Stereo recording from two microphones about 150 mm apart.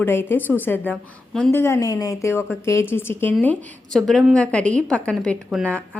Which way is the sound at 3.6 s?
5° left (ahead or behind).